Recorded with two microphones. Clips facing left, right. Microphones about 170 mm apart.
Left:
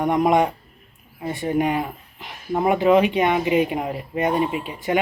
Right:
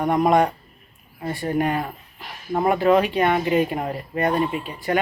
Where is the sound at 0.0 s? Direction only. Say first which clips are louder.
Even; 20° left (ahead or behind).